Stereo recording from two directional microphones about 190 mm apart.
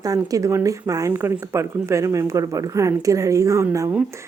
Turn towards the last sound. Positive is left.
turn(degrees=-15)  # may be behind; listen again after turning